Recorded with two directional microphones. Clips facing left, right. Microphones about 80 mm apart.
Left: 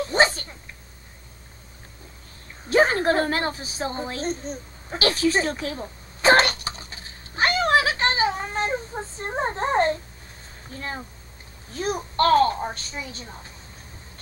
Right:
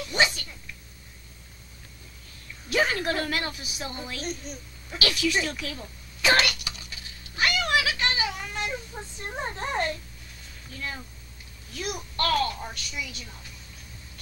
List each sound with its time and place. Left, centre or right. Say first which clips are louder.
0.0 s dog: left 5 dB; left
2.4 s a sound: left 6 dB; left
10.7 s speech: left 4 dB; left